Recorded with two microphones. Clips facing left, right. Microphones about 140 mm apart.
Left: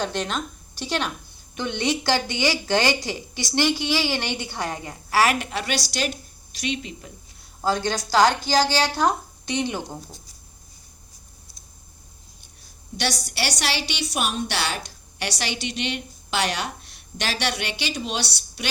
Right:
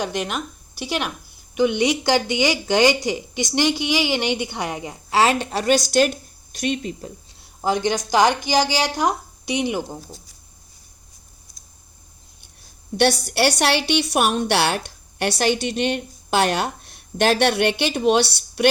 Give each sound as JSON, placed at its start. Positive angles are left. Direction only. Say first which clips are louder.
{"t": 0.0, "sound": "speech", "louder": "right 1 dB", "side_deg": -10}
{"t": 5.5, "sound": "a woman's voice", "louder": "right 8 dB", "side_deg": -40}
{"t": 7.6, "sound": "speech", "louder": "right 3 dB", "side_deg": -15}
{"t": 13.0, "sound": "a woman's voice", "louder": "right 9 dB", "side_deg": -55}